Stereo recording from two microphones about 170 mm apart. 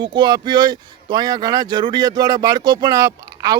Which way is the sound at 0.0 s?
25° right (ahead or behind).